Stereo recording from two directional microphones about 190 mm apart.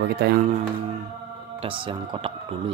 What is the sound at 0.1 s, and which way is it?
Speech, 60° right (ahead or behind).